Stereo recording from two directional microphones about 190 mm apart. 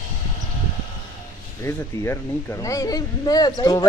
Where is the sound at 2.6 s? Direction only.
15° left (ahead or behind).